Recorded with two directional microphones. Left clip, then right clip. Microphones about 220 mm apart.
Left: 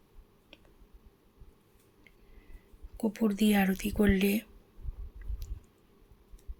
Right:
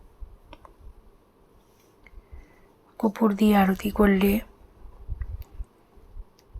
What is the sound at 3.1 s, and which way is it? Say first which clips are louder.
Speech: right 7 dB; 5° right (ahead or behind).